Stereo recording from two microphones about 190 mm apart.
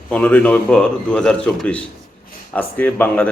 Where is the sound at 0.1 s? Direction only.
5° left (ahead or behind).